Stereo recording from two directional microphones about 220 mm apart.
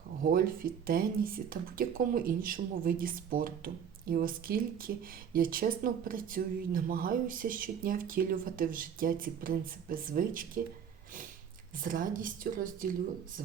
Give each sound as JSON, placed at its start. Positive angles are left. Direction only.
{"t": 0.3, "sound": "speech", "side_deg": -40}
{"t": 11.8, "sound": "speech", "side_deg": -40}